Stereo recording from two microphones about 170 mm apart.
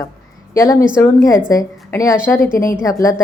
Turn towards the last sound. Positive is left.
turn(degrees=20)  # may be behind; listen again after turning